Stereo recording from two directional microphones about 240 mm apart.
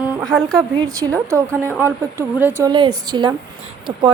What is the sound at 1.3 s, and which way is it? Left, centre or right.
A woman's voice, centre.